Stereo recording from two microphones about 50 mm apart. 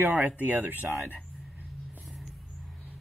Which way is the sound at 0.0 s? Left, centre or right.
Right.